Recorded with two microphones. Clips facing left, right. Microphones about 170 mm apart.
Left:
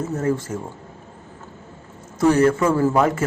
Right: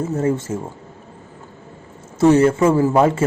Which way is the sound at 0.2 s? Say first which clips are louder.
Right 2 dB; 25° right (ahead or behind).